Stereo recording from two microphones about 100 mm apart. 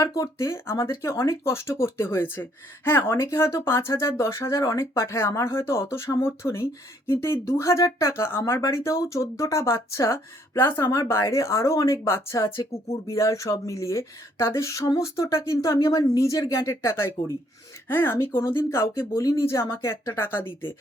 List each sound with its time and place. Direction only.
0.0 s speech: 35° left (ahead or behind)
12.5 s speech: 70° left (ahead or behind)
13.1 s speech: 30° left (ahead or behind)